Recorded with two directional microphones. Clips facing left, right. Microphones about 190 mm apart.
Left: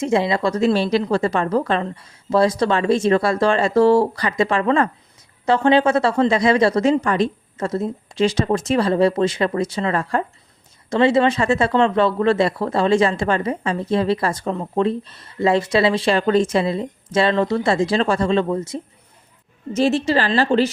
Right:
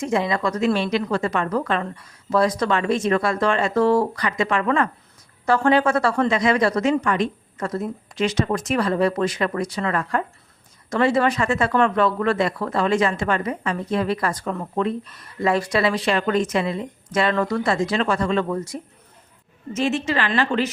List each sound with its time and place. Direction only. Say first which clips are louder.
0.0 s a woman's voice: left 3 dB; 25° left (ahead or behind)
19.7 s a woman's voice: left 5 dB; 35° left (ahead or behind)